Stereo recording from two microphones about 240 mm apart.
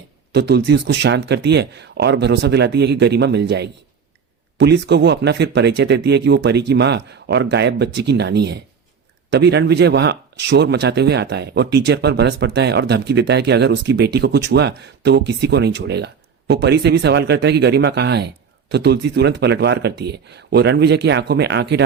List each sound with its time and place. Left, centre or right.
0.3 s speech: right